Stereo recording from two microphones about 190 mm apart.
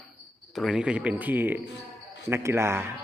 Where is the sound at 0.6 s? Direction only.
Centre (ahead or behind).